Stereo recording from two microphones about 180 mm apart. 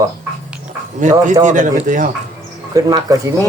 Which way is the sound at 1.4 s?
45° right (ahead or behind).